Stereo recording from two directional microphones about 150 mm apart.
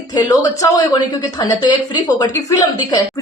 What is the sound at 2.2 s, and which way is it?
Speech, 20° left (ahead or behind).